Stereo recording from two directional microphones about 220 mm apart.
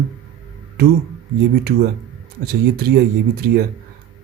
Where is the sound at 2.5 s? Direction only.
45° right (ahead or behind).